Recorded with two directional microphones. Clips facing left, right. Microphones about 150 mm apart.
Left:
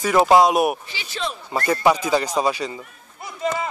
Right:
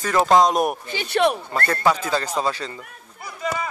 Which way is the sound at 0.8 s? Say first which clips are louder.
Right 10 dB; 55° right (ahead or behind).